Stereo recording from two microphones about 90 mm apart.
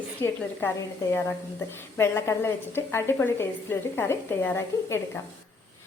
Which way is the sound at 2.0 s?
25° left (ahead or behind).